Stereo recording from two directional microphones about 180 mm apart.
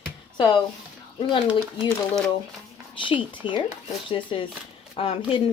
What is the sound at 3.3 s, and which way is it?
Speech, 25° left (ahead or behind).